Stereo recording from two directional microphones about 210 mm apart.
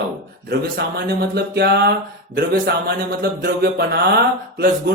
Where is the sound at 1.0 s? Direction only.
50° right (ahead or behind).